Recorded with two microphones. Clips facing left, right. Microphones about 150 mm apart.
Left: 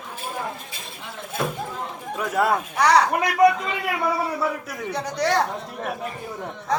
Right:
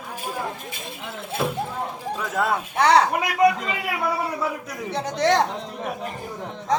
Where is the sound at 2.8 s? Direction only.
25° right (ahead or behind).